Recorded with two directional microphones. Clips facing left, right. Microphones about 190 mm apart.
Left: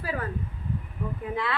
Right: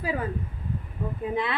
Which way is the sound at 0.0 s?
15° right (ahead or behind).